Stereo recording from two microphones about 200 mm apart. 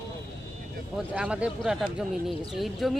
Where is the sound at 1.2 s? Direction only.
5° right (ahead or behind).